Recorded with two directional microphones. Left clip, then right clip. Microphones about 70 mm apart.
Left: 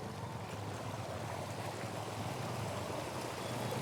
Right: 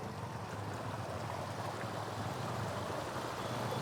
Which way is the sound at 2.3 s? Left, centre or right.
Centre.